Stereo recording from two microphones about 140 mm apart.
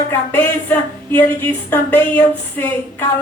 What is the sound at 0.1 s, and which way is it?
A woman's voice, 15° left (ahead or behind).